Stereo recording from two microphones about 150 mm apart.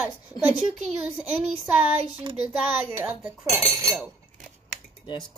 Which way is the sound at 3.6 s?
20° right (ahead or behind).